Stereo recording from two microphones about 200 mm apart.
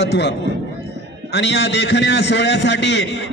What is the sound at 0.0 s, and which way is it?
A man's voice, 60° left (ahead or behind).